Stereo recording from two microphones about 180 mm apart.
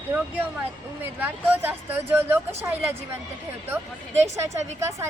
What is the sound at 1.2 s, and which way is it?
Speech, 10° right (ahead or behind).